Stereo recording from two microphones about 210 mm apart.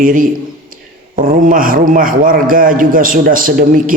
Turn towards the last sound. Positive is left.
turn(degrees=-40)  # may be behind; listen again after turning